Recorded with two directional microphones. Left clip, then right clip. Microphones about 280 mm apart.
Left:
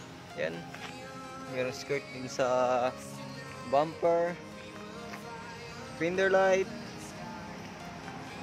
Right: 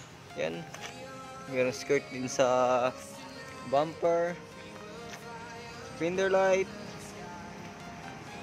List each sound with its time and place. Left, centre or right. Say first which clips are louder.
0.4 s speech: right 1 dB; centre
3.7 s speech: even; centre
5.9 s speech: left 1 dB; centre